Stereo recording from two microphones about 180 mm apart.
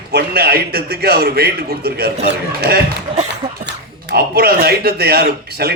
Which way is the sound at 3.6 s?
65° right (ahead or behind).